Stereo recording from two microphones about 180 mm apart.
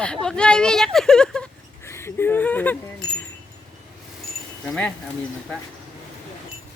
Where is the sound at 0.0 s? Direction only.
5° left (ahead or behind).